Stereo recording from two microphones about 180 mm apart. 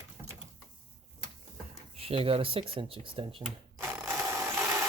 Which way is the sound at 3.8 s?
15° right (ahead or behind).